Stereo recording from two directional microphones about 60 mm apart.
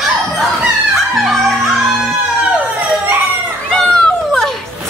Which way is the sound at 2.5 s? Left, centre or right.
Right.